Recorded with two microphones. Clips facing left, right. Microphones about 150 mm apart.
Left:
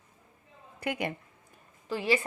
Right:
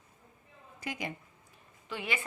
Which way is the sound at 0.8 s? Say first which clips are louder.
Left 6 dB; 60° left (ahead or behind).